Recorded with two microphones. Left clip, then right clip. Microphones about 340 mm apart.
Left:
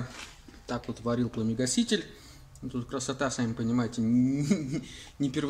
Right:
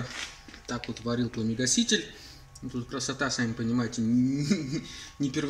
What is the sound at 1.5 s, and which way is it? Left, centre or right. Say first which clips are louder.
Speech: right 3 dB; centre.